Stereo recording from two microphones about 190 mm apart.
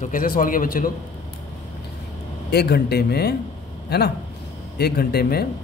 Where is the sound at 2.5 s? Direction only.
55° left (ahead or behind).